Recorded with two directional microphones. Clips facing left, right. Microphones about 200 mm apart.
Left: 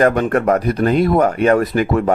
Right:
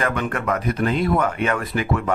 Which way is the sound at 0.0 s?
40° left (ahead or behind).